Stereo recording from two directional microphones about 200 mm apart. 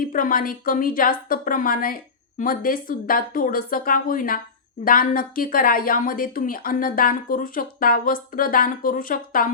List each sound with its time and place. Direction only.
0.0 s a woman's voice: 45° left (ahead or behind)